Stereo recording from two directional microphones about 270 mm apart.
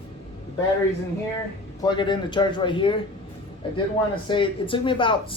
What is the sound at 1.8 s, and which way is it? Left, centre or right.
Speech, centre.